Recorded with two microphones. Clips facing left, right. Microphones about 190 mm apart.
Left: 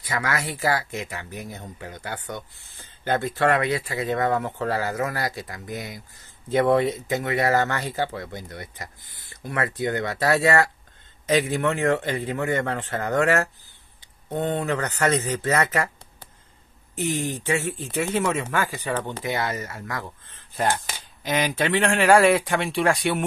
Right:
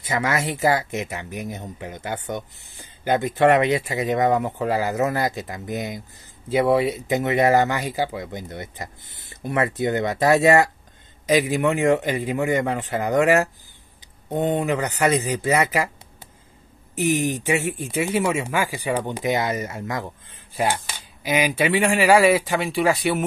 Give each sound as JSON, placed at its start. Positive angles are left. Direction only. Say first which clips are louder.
{"t": 0.0, "sound": "speech", "louder": "right 4 dB", "side_deg": -20}
{"t": 6.5, "sound": "speech", "louder": "right 1 dB", "side_deg": -10}